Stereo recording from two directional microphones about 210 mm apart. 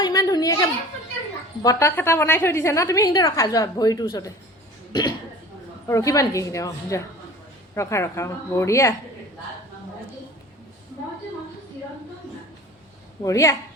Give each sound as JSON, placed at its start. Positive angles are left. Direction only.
{"t": 0.0, "sound": "a sound", "side_deg": 15}
{"t": 1.6, "sound": "a woman's voice", "side_deg": 10}
{"t": 13.2, "sound": "a woman's voice", "side_deg": 15}